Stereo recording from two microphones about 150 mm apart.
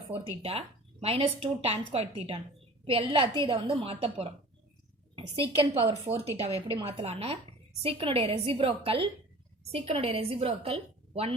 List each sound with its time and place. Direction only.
1.0 s a woman's voice: 40° right (ahead or behind)